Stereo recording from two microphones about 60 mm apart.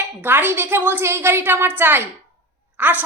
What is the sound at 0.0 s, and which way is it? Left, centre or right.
A woman's voice, right.